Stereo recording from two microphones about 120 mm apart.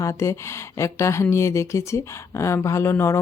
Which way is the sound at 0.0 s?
25° left (ahead or behind).